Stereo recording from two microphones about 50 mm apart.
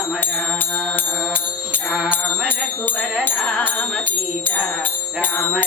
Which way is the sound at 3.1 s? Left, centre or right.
Left.